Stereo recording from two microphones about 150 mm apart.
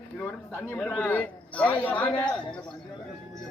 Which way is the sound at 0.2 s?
10° left (ahead or behind).